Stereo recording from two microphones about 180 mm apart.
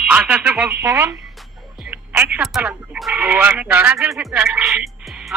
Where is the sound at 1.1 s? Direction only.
Centre (ahead or behind).